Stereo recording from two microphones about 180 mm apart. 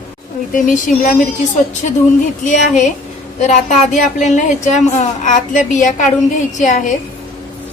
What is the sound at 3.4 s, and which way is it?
A woman's voice, 40° left (ahead or behind).